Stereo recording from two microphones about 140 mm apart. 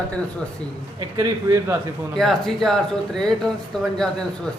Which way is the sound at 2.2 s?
Centre (ahead or behind).